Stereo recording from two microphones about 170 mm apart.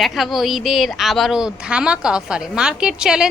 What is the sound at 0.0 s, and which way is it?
A woman's voice, centre (ahead or behind).